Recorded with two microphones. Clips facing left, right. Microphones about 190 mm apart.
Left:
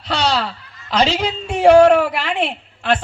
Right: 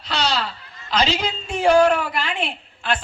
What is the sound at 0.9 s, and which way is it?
Speech, 75° left (ahead or behind).